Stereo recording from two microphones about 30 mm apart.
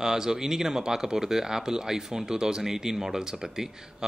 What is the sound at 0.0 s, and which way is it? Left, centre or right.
Speech, right.